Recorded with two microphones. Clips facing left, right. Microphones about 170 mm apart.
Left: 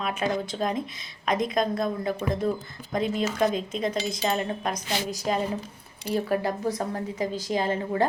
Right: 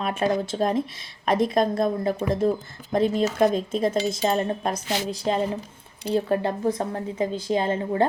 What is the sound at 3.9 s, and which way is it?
Speech, 30° right (ahead or behind).